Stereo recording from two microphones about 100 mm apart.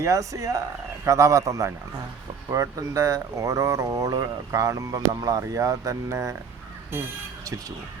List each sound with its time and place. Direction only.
0.0 s speech: 35° right (ahead or behind)